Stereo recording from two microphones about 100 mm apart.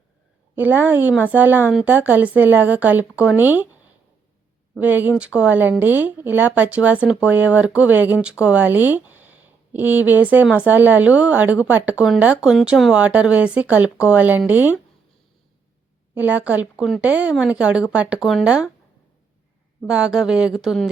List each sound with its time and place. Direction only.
0.5 s speech: 20° right (ahead or behind)
4.8 s speech: 15° right (ahead or behind)
16.1 s speech: 15° right (ahead or behind)
19.9 s speech: 10° right (ahead or behind)